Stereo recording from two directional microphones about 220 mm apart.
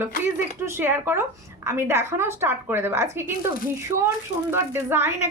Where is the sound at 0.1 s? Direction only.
35° left (ahead or behind).